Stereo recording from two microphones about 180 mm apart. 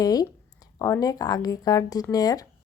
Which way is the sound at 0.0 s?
20° left (ahead or behind).